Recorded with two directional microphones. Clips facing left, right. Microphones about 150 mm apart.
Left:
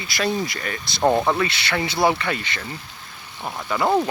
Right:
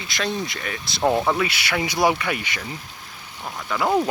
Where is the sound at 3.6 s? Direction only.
5° left (ahead or behind).